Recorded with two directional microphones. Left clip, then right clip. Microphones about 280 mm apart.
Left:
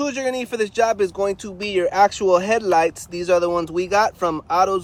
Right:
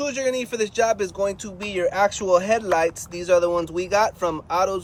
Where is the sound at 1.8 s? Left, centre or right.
Left.